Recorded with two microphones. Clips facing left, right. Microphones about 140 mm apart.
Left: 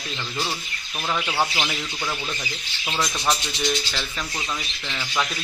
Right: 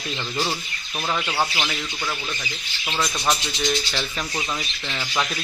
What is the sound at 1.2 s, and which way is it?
Speech, 5° left (ahead or behind).